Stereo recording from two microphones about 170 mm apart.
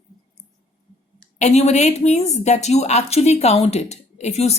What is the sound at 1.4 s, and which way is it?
A woman's voice, 40° left (ahead or behind).